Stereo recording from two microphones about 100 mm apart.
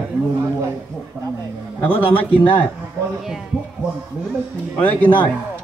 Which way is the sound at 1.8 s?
20° left (ahead or behind).